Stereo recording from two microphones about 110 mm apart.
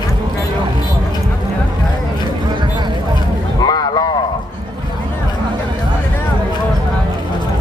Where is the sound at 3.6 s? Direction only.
40° left (ahead or behind).